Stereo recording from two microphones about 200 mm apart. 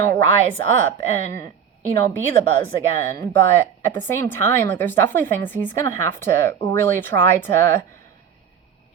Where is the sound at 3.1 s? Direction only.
10° left (ahead or behind).